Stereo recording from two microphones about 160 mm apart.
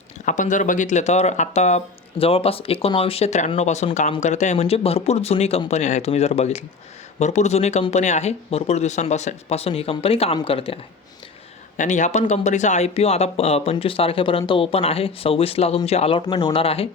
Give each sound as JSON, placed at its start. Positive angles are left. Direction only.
{"t": 0.3, "sound": "speech", "side_deg": 50}
{"t": 11.8, "sound": "speech", "side_deg": 50}